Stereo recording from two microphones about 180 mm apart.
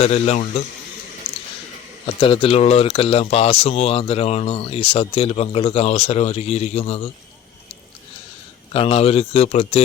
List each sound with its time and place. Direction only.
0.0 s speech: 35° left (ahead or behind)
2.2 s speech: 30° left (ahead or behind)
8.7 s speech: 35° left (ahead or behind)